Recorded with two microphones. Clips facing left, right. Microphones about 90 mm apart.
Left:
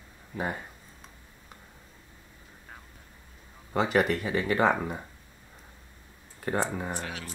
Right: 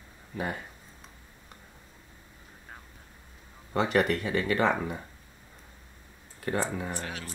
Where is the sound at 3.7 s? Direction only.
5° left (ahead or behind).